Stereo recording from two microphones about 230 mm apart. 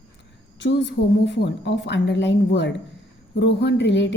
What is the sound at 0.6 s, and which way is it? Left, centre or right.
A woman's voice, left.